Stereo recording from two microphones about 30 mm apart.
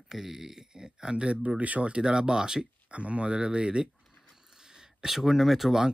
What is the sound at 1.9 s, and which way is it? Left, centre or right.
Speech, right.